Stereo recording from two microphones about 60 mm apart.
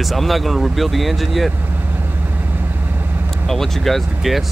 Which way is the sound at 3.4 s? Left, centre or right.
Centre.